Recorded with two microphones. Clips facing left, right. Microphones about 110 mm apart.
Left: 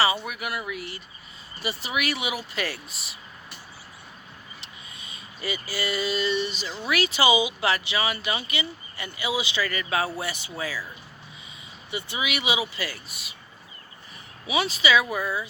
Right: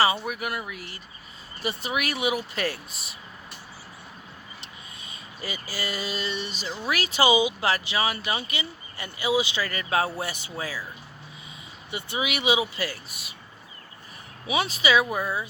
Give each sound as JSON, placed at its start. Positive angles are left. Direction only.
{"t": 0.0, "sound": "speech", "side_deg": -40}
{"t": 5.4, "sound": "speech", "side_deg": -40}
{"t": 11.9, "sound": "speech", "side_deg": -50}
{"t": 14.4, "sound": "speech", "side_deg": -45}